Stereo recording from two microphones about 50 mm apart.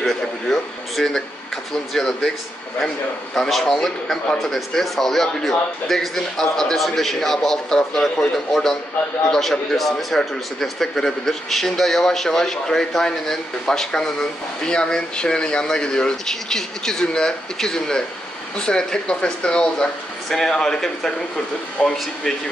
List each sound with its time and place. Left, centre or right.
0.0 s a sound: centre
2.0 s a man's voice: centre
3.3 s a man's voice: centre